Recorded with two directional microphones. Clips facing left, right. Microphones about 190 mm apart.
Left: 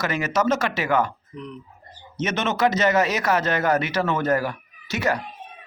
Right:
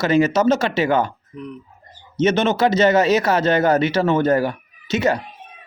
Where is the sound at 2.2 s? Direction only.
30° right (ahead or behind).